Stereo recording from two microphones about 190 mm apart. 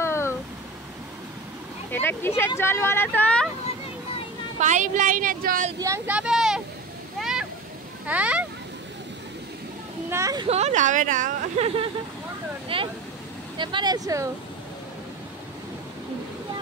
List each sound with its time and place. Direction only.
0.0 s a sound: 15° left (ahead or behind)
1.9 s speech: 10° left (ahead or behind)
4.6 s speech: 40° right (ahead or behind)
5.8 s speech: 10° right (ahead or behind)
7.2 s a sound: 5° right (ahead or behind)
8.1 s speech: 5° right (ahead or behind)
10.0 s speech: 15° right (ahead or behind)
10.5 s speech: 35° right (ahead or behind)
12.6 s a sound: 30° right (ahead or behind)
13.6 s speech: 25° right (ahead or behind)